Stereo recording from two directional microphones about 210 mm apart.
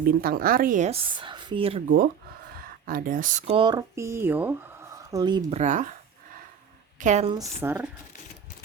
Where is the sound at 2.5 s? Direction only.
40° right (ahead or behind); by 5.6 s 20° right (ahead or behind).